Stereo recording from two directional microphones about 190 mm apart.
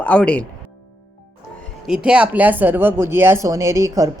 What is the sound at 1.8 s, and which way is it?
Speech, 5° right (ahead or behind).